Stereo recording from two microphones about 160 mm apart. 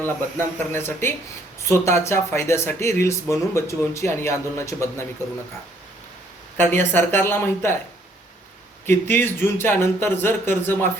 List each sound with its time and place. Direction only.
0.3 s speech: 15° left (ahead or behind)
6.6 s speech: 15° left (ahead or behind)
8.9 s speech: 15° left (ahead or behind)